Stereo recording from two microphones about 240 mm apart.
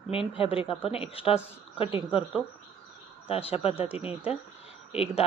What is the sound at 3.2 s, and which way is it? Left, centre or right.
Speech, left.